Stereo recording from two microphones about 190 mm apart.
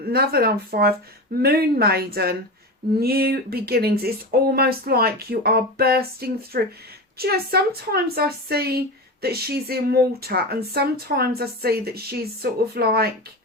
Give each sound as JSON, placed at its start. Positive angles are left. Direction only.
{"t": 0.0, "sound": "speech", "side_deg": -55}